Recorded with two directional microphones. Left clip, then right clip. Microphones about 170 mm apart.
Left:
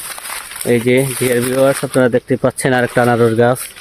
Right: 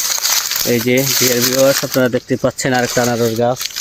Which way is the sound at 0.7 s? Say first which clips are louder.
Left 3 dB; 30° left (ahead or behind).